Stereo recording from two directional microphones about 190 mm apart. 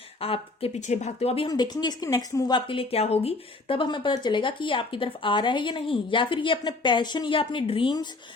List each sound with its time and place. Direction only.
0.2 s speech: 30° left (ahead or behind)
1.5 s a woman's voice: 20° left (ahead or behind)